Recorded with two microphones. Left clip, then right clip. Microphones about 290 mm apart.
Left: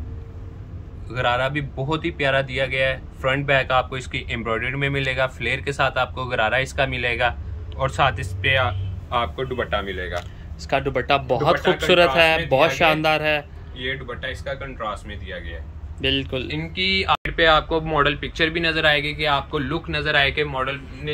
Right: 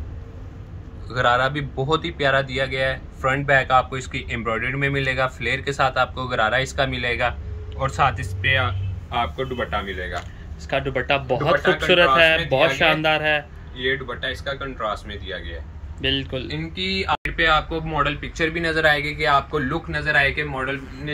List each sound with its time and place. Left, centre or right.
1.0 s a man's voice: centre
16.0 s speech: centre